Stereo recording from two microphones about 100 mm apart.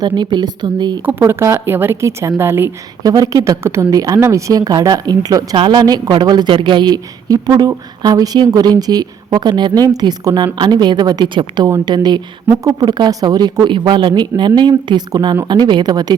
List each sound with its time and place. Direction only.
0.0 s a woman's voice: 45° right (ahead or behind)
1.0 s a woman's voice: 25° right (ahead or behind)
3.0 s speech: 35° right (ahead or behind)
5.5 s a woman's voice: 50° right (ahead or behind)